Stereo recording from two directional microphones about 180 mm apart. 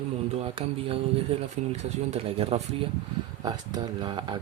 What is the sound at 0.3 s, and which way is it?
Speech, 30° right (ahead or behind).